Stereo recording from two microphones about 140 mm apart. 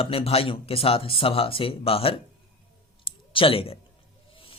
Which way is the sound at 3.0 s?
40° left (ahead or behind).